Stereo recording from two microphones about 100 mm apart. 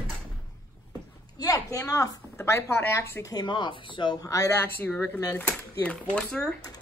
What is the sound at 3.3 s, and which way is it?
Speech, 50° left (ahead or behind).